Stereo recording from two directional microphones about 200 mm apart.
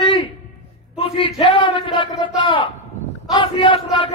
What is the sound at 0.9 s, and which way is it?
A man's voice, 25° left (ahead or behind).